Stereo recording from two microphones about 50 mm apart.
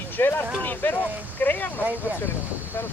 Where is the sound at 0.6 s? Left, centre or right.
Left.